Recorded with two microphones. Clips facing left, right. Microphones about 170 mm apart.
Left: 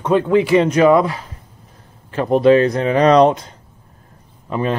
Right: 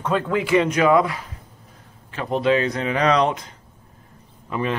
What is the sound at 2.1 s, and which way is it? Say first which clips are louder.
Speech: left 8 dB; 45° left (ahead or behind).